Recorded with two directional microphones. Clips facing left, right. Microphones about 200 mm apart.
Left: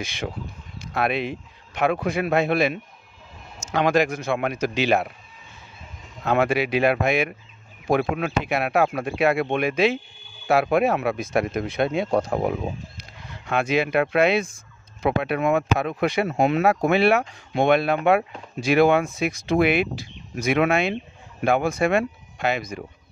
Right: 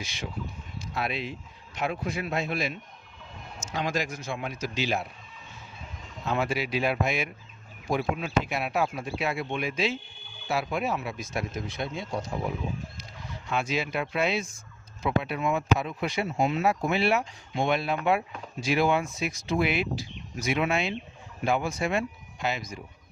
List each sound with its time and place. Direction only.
0.0 s speech: 55° left (ahead or behind)
6.2 s speech: 65° left (ahead or behind)